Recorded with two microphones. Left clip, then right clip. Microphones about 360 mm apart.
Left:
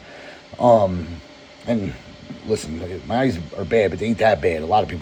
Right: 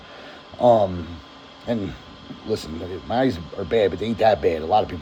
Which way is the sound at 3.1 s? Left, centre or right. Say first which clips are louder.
Left 1 dB; left.